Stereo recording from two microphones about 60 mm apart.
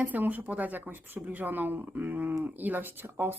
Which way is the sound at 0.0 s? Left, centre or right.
Right.